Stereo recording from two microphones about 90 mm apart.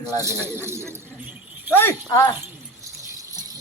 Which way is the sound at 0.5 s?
30° right (ahead or behind).